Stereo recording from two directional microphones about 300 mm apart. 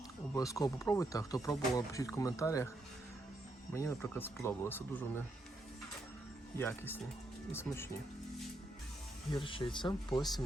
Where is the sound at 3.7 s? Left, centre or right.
Centre.